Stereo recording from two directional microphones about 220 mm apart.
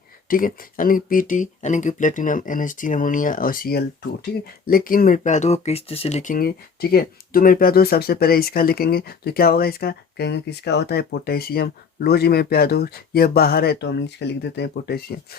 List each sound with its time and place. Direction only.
0.3 s speech: 40° left (ahead or behind)